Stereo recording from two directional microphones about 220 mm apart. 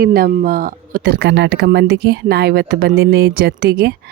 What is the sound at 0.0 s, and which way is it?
Speech, 45° right (ahead or behind).